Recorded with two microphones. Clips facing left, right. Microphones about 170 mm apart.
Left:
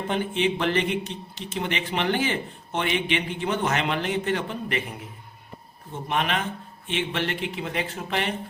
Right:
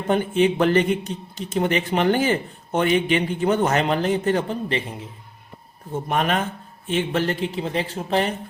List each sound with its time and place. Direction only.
0.1 s speech: 45° right (ahead or behind)
5.9 s a man's voice: 45° right (ahead or behind)